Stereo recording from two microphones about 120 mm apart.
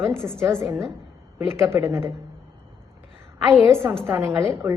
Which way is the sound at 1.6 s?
25° right (ahead or behind).